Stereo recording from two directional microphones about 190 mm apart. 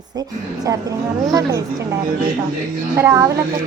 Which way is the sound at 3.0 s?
15° right (ahead or behind).